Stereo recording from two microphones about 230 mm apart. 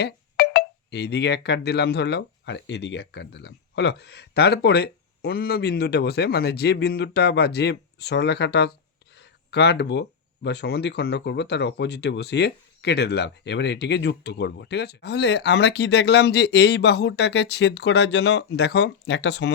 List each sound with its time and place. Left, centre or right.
0.0 s speech: left